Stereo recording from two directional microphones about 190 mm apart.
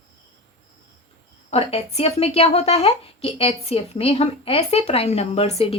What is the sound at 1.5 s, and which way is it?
A woman's voice, 30° left (ahead or behind).